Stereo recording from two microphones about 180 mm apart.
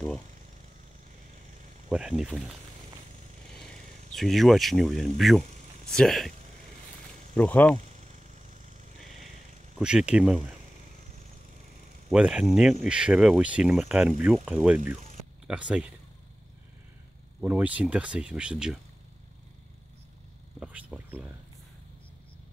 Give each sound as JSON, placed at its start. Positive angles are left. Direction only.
{"t": 1.9, "sound": "speech", "side_deg": -5}
{"t": 4.1, "sound": "speech", "side_deg": 0}
{"t": 7.3, "sound": "speech", "side_deg": 10}
{"t": 8.0, "sound": "a sound", "side_deg": -40}
{"t": 9.8, "sound": "speech", "side_deg": -5}
{"t": 12.1, "sound": "speech", "side_deg": -5}
{"t": 17.4, "sound": "speech", "side_deg": -10}
{"t": 20.5, "sound": "speech", "side_deg": -5}